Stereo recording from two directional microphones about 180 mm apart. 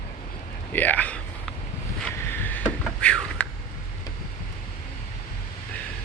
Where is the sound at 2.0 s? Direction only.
10° left (ahead or behind).